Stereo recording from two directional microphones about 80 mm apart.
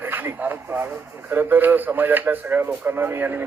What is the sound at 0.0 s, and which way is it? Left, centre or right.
Radio, right.